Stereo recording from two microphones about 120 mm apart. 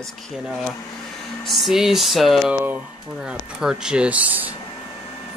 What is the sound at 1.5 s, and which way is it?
Speech, centre (ahead or behind).